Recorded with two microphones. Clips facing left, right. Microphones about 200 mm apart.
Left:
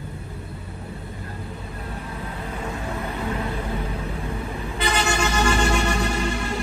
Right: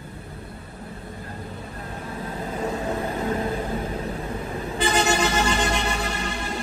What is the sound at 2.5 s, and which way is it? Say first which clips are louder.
Music: right 5 dB; 35° right (ahead or behind).